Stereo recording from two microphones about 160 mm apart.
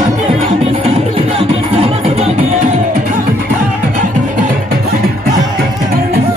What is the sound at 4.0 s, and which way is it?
Music, 55° right (ahead or behind).